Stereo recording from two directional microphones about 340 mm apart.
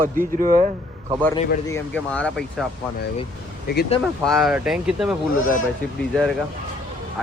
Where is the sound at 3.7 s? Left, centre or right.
Left.